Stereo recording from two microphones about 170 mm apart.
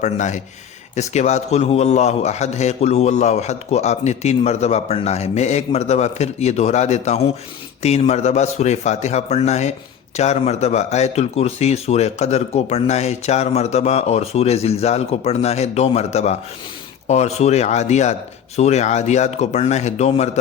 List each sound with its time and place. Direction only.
0.0 s speech: 45° left (ahead or behind)